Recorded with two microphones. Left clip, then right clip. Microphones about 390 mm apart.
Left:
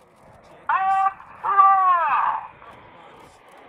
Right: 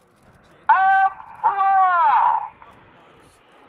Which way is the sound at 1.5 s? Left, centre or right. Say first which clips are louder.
Left 2 dB; right.